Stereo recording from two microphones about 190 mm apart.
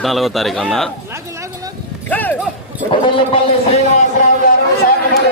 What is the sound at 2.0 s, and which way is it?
Clip-clop, 10° left (ahead or behind).